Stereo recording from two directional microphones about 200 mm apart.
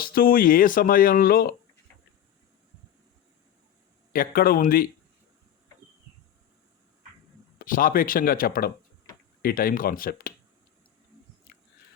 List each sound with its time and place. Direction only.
0.0 s speech: 45° left (ahead or behind)
4.1 s speech: 45° left (ahead or behind)
7.6 s speech: 45° left (ahead or behind)
11.5 s a sound: 50° left (ahead or behind)